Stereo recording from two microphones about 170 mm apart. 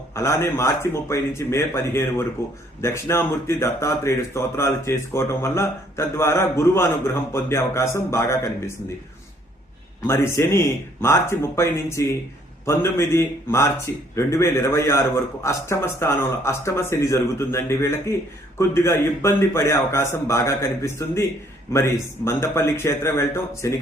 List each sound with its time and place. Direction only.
0.1 s speech: 15° left (ahead or behind)
10.1 s speech: 15° left (ahead or behind)